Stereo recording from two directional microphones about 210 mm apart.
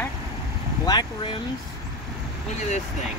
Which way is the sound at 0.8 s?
20° left (ahead or behind).